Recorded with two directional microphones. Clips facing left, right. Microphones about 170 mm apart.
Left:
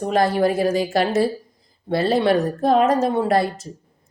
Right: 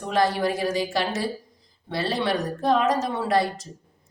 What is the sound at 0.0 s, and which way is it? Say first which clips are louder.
A woman's voice: left 5 dB; 50° left (ahead or behind).